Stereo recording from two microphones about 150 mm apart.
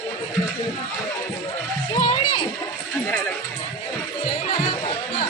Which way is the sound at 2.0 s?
30° left (ahead or behind).